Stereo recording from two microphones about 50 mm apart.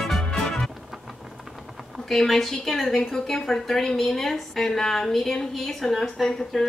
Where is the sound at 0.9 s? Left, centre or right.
Centre.